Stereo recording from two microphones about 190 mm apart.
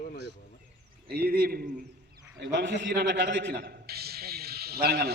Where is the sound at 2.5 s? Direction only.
70° right (ahead or behind).